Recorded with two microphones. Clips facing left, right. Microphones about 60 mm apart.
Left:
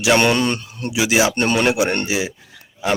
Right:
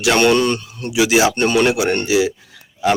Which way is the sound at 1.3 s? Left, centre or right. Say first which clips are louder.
Right 2 dB; left.